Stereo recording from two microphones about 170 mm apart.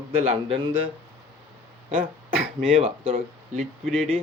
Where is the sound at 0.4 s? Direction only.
30° right (ahead or behind).